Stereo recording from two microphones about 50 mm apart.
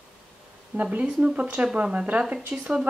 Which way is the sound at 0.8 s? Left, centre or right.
Right.